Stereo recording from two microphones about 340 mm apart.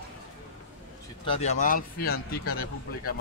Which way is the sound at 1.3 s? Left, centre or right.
Centre.